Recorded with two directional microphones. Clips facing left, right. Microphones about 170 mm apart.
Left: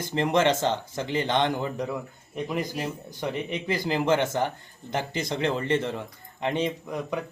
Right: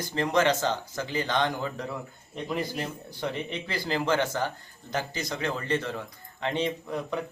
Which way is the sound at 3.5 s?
15° left (ahead or behind).